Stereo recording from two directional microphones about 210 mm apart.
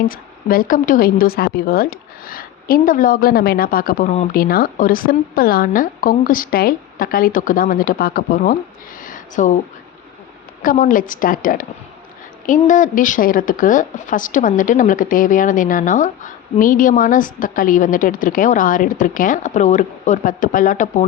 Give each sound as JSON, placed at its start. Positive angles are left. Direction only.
{"t": 0.0, "sound": "speech", "side_deg": 45}
{"t": 4.4, "sound": "speech", "side_deg": 45}
{"t": 9.0, "sound": "a sound", "side_deg": 40}
{"t": 10.6, "sound": "a woman's voice", "side_deg": 40}